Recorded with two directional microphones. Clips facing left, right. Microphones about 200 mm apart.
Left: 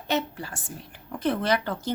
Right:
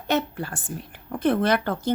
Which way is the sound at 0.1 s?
55° right (ahead or behind).